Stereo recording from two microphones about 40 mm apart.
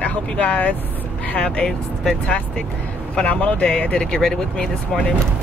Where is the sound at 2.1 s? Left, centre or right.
Left.